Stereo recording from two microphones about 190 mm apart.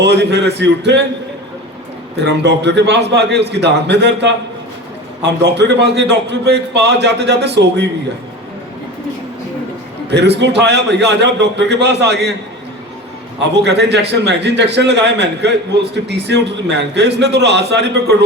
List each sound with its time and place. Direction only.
0.0 s a man's voice: 65° right (ahead or behind)
2.1 s a man's voice: 65° right (ahead or behind)
10.1 s a man's voice: 65° right (ahead or behind)
13.6 s a man's voice: 65° right (ahead or behind)